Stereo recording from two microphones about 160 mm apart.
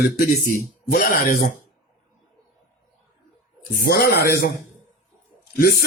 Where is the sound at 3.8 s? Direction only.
80° left.